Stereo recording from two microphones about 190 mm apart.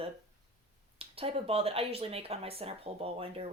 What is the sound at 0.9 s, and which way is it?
Speech, 30° right (ahead or behind).